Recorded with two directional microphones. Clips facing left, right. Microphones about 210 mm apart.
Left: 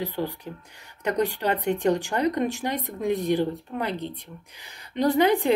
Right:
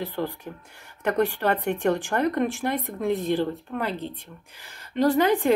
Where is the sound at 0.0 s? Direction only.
15° left (ahead or behind).